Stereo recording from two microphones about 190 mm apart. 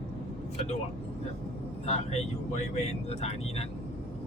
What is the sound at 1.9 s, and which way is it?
Speech, 35° left (ahead or behind).